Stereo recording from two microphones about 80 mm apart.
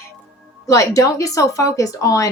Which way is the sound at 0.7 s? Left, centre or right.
Left.